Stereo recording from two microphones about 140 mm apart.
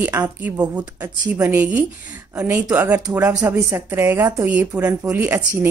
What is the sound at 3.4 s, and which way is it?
A woman's voice, 25° right (ahead or behind).